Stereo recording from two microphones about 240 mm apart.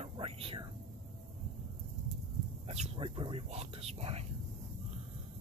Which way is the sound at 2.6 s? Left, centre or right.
Right.